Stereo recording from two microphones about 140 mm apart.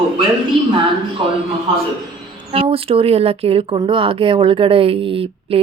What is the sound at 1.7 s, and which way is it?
A man's voice, 40° right (ahead or behind).